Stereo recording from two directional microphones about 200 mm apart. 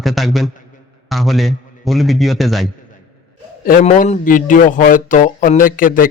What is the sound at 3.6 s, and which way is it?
Speech, 40° left (ahead or behind).